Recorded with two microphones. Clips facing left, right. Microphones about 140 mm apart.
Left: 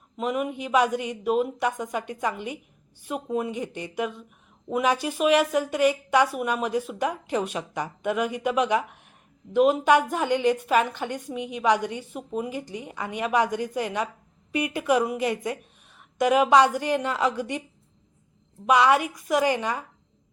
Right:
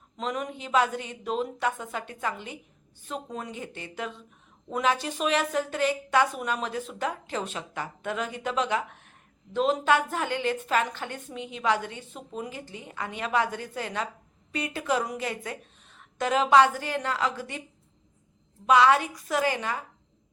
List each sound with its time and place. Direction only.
0.2 s a woman's voice: 10° left (ahead or behind)
18.6 s a woman's voice: 15° left (ahead or behind)